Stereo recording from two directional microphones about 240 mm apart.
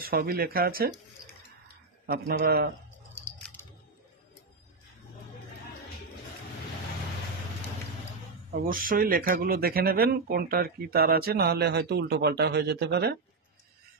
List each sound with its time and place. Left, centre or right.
0.0 s speech: right
2.0 s speech: right
8.5 s speech: right